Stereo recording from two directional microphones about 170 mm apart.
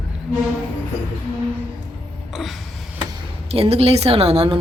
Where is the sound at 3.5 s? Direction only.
35° right (ahead or behind).